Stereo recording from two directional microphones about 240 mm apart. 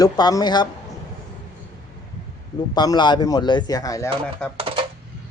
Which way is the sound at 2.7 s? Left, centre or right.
Centre.